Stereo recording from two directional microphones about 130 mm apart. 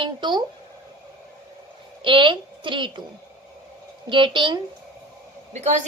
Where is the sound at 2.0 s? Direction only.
40° right (ahead or behind).